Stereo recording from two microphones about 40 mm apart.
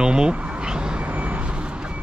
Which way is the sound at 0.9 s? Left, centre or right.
Right.